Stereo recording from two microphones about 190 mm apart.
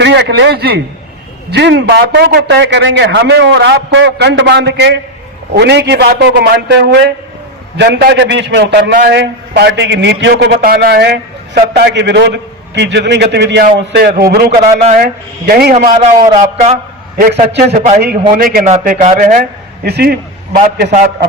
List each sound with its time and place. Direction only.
0.0 s a man's voice: 65° right (ahead or behind)
16.0 s a man's voice: 35° right (ahead or behind)
17.5 s a man's voice: 60° right (ahead or behind)